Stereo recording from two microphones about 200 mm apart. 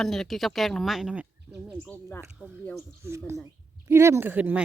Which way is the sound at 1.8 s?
10° left (ahead or behind).